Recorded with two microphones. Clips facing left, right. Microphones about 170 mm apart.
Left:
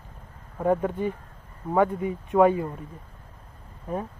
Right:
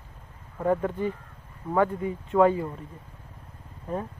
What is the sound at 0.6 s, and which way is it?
Speech, 15° left (ahead or behind).